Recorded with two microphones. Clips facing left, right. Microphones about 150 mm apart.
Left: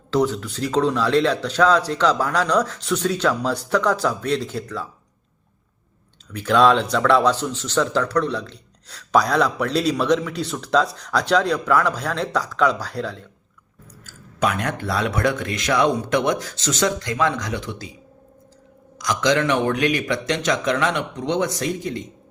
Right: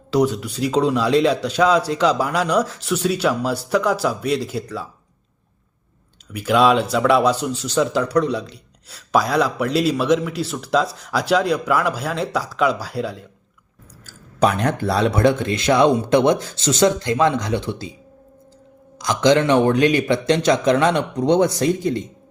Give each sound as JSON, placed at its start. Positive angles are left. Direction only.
{"t": 0.1, "sound": "speech", "side_deg": -15}
{"t": 6.3, "sound": "speech", "side_deg": -10}
{"t": 14.3, "sound": "speech", "side_deg": -30}
{"t": 18.9, "sound": "a man's voice", "side_deg": -30}